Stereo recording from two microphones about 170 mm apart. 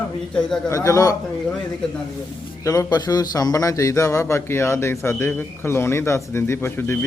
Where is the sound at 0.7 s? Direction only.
20° left (ahead or behind).